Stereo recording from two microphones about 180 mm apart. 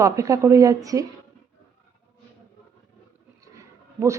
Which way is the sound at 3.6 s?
15° right (ahead or behind).